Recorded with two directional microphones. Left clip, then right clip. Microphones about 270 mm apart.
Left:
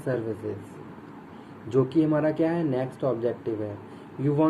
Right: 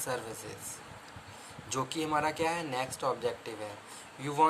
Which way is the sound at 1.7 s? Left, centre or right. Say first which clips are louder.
Left 9 dB; right.